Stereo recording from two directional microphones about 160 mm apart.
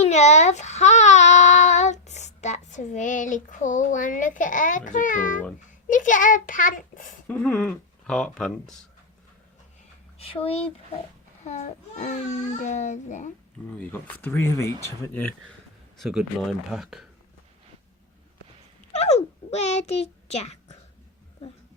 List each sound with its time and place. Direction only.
0.0 s a child's voice: 45° left (ahead or behind)
7.3 s speech: 10° left (ahead or behind)
10.2 s speech: 35° left (ahead or behind)
13.7 s speech: 10° left (ahead or behind)
16.0 s speech: centre (ahead or behind)
18.9 s a child's voice: 45° left (ahead or behind)